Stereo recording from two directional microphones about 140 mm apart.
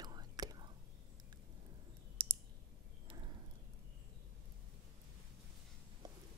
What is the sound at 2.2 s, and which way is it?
Clicking, 40° right (ahead or behind).